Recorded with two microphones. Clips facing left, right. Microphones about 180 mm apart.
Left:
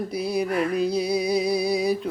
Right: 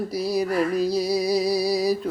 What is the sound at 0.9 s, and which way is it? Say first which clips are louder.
Music: right 1 dB; 55° left (ahead or behind).